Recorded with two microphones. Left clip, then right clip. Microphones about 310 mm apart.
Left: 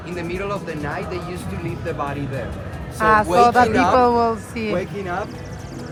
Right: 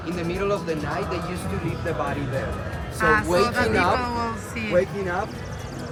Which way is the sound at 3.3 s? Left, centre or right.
Centre.